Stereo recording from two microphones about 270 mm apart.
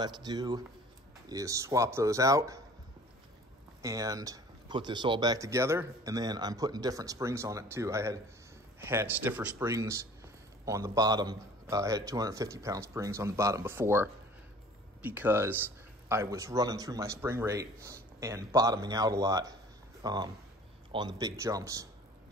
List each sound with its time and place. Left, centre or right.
0.0 s speech: centre
3.8 s speech: centre